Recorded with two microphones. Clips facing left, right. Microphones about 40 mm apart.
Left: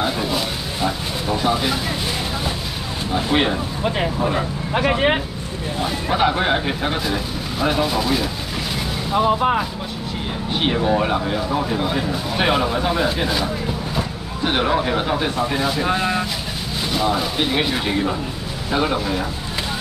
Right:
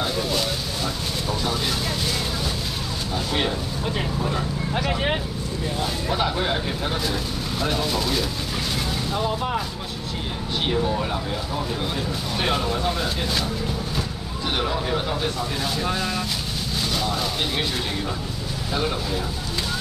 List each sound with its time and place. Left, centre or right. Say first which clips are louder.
0.8 s a sound: left 7 dB; left
3.2 s speech: left 6 dB; left
7.6 s speech: left 6 dB; centre
9.1 s speech: left 9 dB; left; by 13.5 s centre
14.4 s speech: left 6 dB; left
15.6 s speech: left 5 dB; centre
15.9 s speech: left 5 dB; left